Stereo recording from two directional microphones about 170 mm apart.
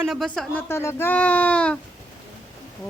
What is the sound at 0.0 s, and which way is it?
Speech, centre (ahead or behind).